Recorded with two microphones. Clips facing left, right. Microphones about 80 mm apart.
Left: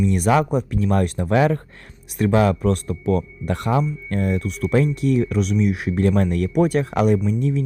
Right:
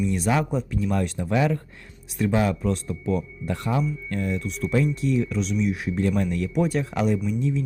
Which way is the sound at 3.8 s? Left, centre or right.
Left.